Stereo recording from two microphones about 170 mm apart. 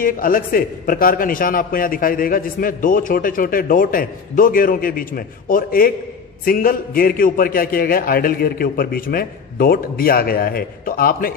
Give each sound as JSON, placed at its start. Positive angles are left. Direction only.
{"t": 0.0, "sound": "a man's voice", "side_deg": 55}